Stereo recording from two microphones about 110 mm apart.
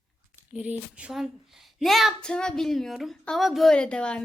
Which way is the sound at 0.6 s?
10° right (ahead or behind).